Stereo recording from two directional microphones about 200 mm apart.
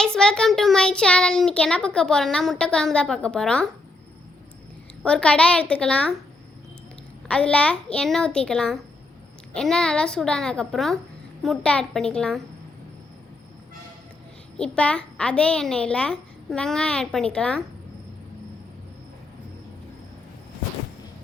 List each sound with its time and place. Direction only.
0.0 s child singing: 5° left (ahead or behind)
5.0 s child singing: 5° left (ahead or behind)
7.3 s child singing: 5° left (ahead or behind)
14.6 s child singing: 5° left (ahead or behind)